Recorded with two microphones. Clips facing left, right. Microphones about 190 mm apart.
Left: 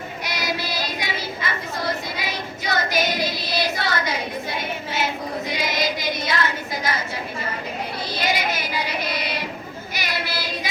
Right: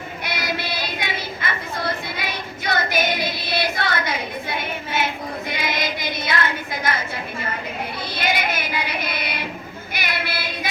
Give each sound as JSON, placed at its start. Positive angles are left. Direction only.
{"t": 0.3, "sound": "child singing", "side_deg": -55}
{"t": 8.1, "sound": "child singing", "side_deg": -55}